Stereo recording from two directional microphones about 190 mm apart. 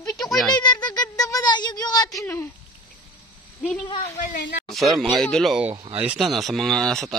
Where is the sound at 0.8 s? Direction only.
20° left (ahead or behind).